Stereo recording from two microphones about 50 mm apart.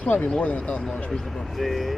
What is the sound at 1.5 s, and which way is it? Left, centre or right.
Speech, centre.